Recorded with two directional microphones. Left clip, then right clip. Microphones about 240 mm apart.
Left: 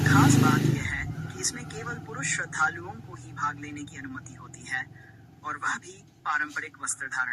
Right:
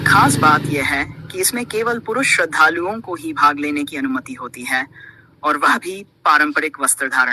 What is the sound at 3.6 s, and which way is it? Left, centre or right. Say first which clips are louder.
Speech: right 18 dB; right.